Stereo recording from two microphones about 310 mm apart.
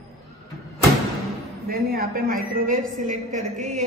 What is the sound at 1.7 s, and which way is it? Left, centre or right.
A woman's voice, right.